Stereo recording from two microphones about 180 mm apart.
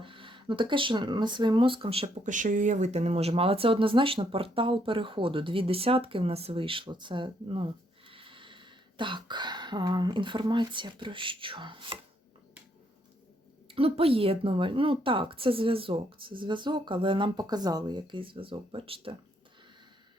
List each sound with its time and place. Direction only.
0.0 s speech: 30° right (ahead or behind)
13.7 s speech: 30° right (ahead or behind)